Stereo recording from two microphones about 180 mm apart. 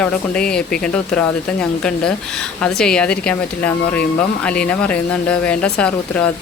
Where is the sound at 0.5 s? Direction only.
5° left (ahead or behind).